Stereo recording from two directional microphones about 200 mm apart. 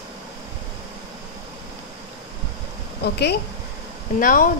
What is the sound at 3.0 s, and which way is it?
Speech, 55° left (ahead or behind).